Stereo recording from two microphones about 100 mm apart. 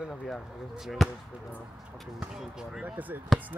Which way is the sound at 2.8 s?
15° right (ahead or behind).